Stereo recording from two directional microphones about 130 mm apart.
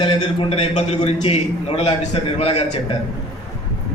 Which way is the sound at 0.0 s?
45° left (ahead or behind).